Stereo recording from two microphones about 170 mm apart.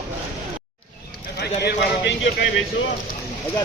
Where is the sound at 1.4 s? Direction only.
75° left (ahead or behind).